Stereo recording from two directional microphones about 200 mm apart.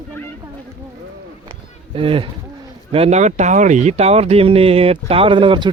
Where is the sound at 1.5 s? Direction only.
25° right (ahead or behind).